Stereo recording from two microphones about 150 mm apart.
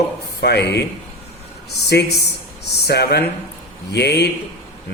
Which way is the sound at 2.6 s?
90° left.